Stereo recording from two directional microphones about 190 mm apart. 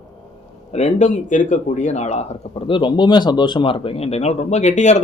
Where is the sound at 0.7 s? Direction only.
35° left (ahead or behind).